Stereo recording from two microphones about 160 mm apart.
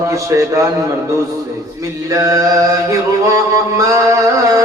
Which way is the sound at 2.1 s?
20° right (ahead or behind).